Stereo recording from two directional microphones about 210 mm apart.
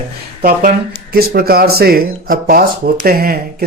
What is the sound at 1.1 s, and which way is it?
Speech, 45° right (ahead or behind).